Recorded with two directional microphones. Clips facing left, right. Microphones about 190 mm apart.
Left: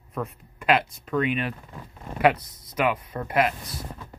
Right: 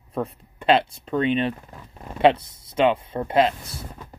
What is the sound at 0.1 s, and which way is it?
Speech, 30° right (ahead or behind).